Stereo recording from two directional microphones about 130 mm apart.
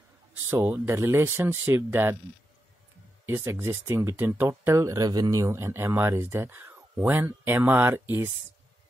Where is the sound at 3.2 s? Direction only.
20° right (ahead or behind).